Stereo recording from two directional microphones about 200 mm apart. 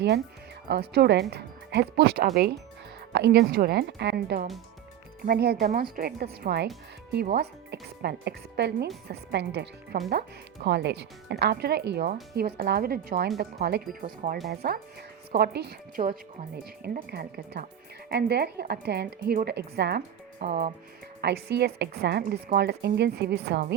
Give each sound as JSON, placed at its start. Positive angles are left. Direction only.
{"t": 0.7, "sound": "speech", "side_deg": -55}
{"t": 20.5, "sound": "speech", "side_deg": -35}
{"t": 21.2, "sound": "speech", "side_deg": -55}